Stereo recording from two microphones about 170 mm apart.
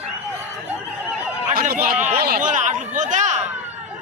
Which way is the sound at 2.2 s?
55° right (ahead or behind).